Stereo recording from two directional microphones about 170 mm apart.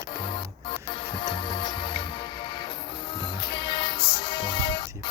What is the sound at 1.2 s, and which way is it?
Music, 25° left (ahead or behind).